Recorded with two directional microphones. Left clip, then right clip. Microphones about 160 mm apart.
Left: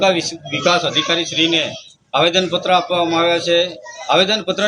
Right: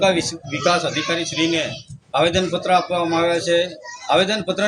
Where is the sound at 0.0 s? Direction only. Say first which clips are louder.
Left 2 dB; 15° right (ahead or behind).